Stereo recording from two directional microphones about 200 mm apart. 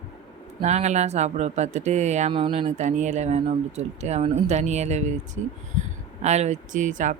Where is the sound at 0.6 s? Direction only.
35° right (ahead or behind).